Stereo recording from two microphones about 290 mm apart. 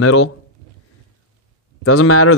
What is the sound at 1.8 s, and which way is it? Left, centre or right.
Speech, left.